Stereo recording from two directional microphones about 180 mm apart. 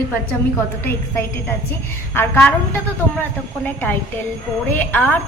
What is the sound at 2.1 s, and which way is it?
Speech, 10° left (ahead or behind).